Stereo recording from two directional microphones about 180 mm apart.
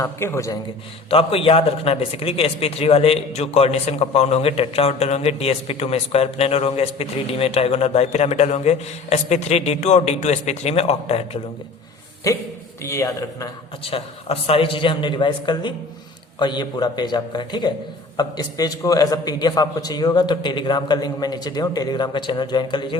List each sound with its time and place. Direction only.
0.0 s a man's voice: 15° left (ahead or behind)
1.1 s a man's voice: 30° left (ahead or behind)
12.3 s a man's voice: 20° left (ahead or behind)
13.8 s a man's voice: 35° left (ahead or behind)